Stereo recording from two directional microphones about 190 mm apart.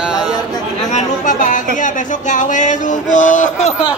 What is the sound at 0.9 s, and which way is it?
Speech, 40° left (ahead or behind).